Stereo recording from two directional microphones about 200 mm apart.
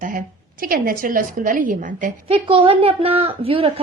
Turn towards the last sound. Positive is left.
turn(degrees=-30)  # may be behind; listen again after turning